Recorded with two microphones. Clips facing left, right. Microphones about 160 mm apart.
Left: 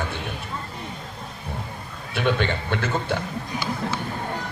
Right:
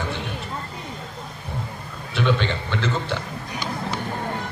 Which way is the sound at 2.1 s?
50° left (ahead or behind).